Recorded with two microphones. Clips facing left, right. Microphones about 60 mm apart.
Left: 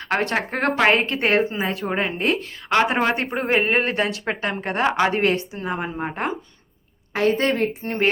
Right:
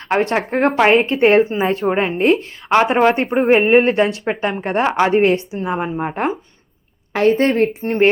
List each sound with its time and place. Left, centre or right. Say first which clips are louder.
0.1 s a woman's voice: right 5 dB; right
1.9 s a woman's voice: right 7 dB; right
7.1 s a woman's voice: right 5 dB; right